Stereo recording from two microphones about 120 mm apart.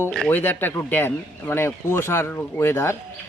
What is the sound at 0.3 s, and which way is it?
A man's voice, 15° left (ahead or behind).